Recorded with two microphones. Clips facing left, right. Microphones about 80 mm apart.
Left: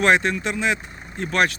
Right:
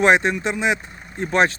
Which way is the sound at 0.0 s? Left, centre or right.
Right.